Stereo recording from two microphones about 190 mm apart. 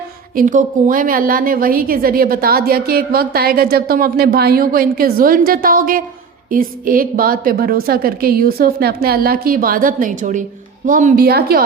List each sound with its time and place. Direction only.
0.3 s a woman's voice: 45° right (ahead or behind)